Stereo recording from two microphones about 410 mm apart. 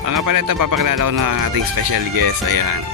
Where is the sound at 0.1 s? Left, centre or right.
Right.